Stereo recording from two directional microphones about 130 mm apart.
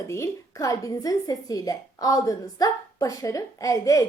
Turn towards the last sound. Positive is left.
turn(degrees=25)  # may be behind; listen again after turning